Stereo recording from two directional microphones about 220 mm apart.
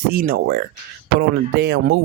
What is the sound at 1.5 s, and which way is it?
Speech, 50° right (ahead or behind).